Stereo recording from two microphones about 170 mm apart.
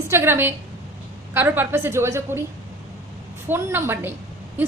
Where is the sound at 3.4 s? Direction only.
15° right (ahead or behind).